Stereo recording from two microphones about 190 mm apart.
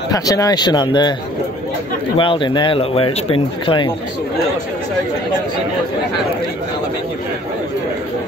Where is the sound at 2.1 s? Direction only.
25° left (ahead or behind).